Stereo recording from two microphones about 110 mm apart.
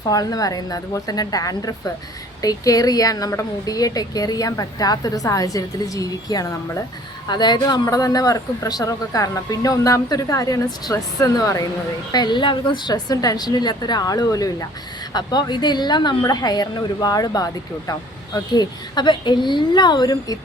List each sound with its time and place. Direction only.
0.1 s speech: 35° left (ahead or behind)
12.1 s speech: 40° left (ahead or behind)